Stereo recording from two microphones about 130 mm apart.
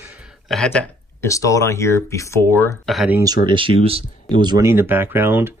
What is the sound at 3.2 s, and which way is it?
Speech, 40° right (ahead or behind).